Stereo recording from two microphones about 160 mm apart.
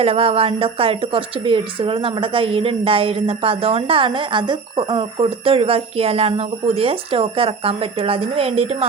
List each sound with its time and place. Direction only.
0.0 s a woman's voice: 40° right (ahead or behind)